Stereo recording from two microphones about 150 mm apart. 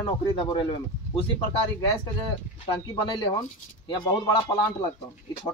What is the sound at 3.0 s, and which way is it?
Speech, 35° left (ahead or behind).